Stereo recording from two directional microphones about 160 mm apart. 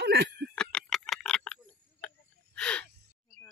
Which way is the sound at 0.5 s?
5° left (ahead or behind).